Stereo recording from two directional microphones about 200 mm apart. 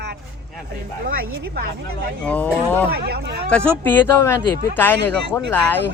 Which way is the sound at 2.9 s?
50° right (ahead or behind).